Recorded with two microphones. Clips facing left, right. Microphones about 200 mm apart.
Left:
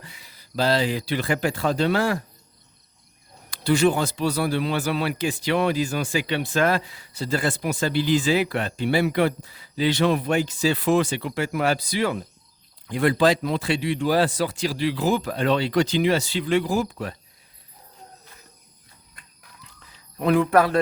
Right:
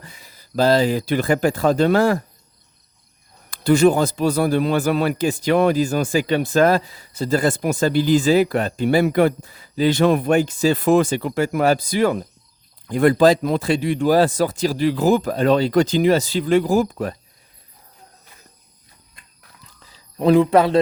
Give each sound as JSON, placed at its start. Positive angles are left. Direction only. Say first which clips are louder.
{"t": 0.0, "sound": "speech", "louder": "right 3 dB", "side_deg": -45}
{"t": 3.5, "sound": "speech", "louder": "right 5 dB", "side_deg": -45}
{"t": 19.6, "sound": "a sound", "louder": "right 1 dB", "side_deg": -30}